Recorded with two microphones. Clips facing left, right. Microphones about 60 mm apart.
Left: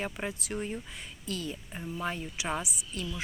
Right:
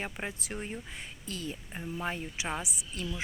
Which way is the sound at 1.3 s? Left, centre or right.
Right.